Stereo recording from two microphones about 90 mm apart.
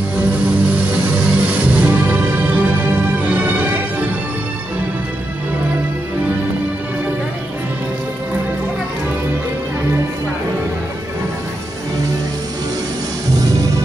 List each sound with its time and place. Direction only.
0.5 s music: 15° right (ahead or behind)